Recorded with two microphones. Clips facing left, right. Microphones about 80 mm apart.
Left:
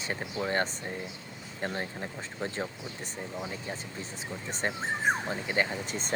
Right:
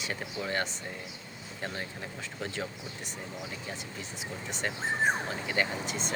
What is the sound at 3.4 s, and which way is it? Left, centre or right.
Speech, left.